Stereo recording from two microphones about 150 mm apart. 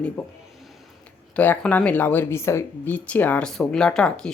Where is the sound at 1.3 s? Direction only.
10° left (ahead or behind).